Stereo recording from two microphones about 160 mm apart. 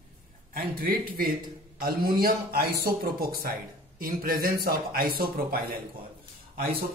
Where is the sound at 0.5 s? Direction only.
65° right (ahead or behind).